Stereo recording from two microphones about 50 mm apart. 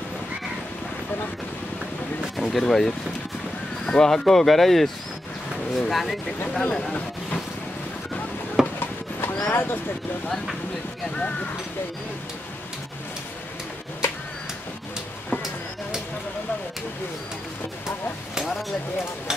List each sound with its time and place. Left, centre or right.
2.3 s speech: centre
6.6 s speech: centre
8.7 s clip-clop: left
11.1 s speech: left